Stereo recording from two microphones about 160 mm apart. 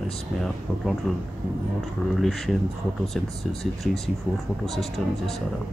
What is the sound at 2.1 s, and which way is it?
Speech, centre (ahead or behind).